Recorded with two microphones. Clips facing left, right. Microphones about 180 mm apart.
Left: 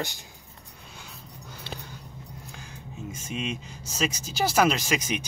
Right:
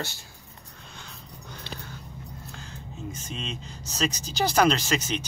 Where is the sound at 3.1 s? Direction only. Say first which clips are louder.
Left 6 dB; 10° left (ahead or behind).